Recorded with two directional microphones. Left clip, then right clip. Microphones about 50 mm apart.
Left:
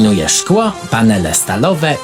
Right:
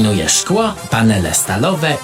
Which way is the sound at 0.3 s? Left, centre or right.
Left.